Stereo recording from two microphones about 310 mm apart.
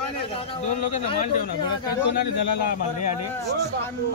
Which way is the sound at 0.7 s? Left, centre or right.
Left.